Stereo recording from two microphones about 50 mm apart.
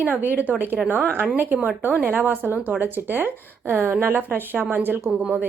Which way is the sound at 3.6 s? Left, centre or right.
Right.